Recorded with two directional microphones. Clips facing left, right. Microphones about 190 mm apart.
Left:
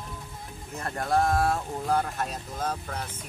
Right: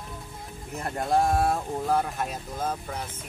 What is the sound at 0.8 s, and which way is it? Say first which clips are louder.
Speech: right 1 dB; 20° right (ahead or behind).